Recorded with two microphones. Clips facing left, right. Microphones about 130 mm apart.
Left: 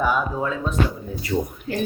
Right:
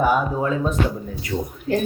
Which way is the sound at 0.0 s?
45° right (ahead or behind).